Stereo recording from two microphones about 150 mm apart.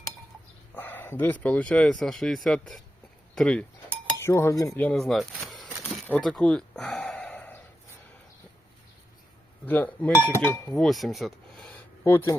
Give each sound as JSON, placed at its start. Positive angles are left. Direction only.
{"t": 0.7, "sound": "speech", "side_deg": 10}
{"t": 4.2, "sound": "cutlery", "side_deg": 20}
{"t": 4.9, "sound": "a sound", "side_deg": 0}
{"t": 9.6, "sound": "speech", "side_deg": 10}
{"t": 10.8, "sound": "speech", "side_deg": 0}
{"t": 12.0, "sound": "speech", "side_deg": 15}